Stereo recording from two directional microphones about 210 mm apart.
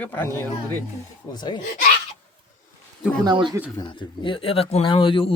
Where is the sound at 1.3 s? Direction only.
20° left (ahead or behind).